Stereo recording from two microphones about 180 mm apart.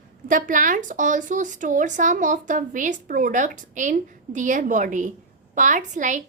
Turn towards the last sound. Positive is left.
turn(degrees=-45)  # may be behind; listen again after turning